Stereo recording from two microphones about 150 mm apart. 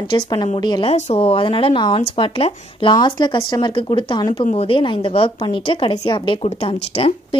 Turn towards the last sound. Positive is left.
turn(degrees=40)  # may be behind; listen again after turning